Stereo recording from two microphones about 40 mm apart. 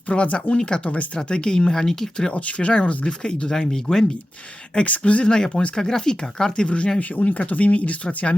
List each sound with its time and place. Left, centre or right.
0.1 s speech: left
1.7 s speech: centre
2.3 s speech: left; by 4.0 s centre
4.9 s speech: left
5.3 s speech: centre
6.7 s speech: left